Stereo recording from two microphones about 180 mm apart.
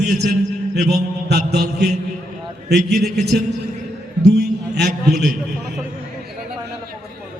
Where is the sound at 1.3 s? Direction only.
65° right (ahead or behind).